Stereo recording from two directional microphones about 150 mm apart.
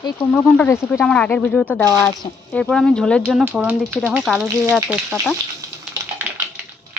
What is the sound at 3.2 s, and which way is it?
Speech, 10° right (ahead or behind).